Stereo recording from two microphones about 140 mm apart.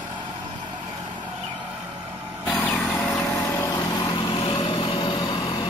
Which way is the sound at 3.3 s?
20° left (ahead or behind).